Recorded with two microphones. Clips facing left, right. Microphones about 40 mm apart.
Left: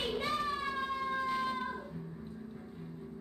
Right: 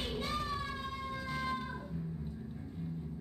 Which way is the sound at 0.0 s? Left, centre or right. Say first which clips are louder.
Left 4 dB; left.